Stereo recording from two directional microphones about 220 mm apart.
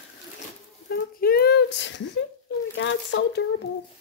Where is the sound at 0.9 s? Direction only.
45° left (ahead or behind).